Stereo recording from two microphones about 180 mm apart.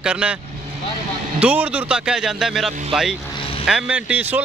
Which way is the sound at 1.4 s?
10° right (ahead or behind).